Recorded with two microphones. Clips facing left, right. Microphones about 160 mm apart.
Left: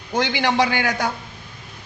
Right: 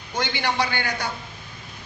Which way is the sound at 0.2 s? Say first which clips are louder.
Left 5 dB; 90° left.